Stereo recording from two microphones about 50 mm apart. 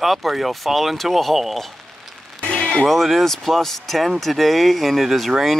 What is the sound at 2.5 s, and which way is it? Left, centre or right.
Music, centre.